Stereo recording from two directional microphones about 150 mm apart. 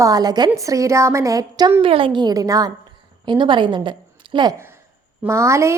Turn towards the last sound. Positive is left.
turn(degrees=-20)  # may be behind; listen again after turning